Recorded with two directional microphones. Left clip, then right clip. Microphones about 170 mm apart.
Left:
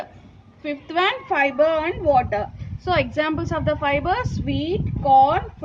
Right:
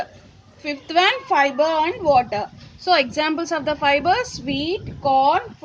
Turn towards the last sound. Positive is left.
turn(degrees=-20)  # may be behind; listen again after turning